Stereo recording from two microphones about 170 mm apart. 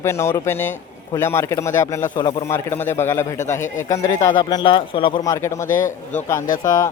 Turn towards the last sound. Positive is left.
turn(degrees=20)  # may be behind; listen again after turning